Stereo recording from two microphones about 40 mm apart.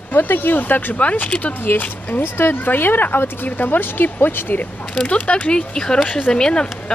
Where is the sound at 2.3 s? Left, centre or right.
Left.